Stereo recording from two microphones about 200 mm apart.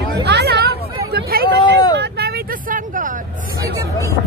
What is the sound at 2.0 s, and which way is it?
Vehicle, 55° right (ahead or behind).